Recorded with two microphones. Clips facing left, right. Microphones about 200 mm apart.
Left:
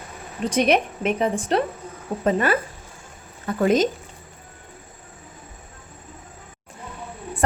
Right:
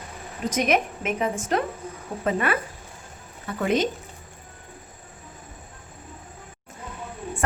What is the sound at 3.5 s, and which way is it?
Speech, 40° left (ahead or behind).